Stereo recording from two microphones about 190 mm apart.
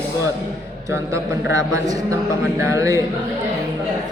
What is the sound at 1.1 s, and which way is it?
A man's voice, 15° right (ahead or behind).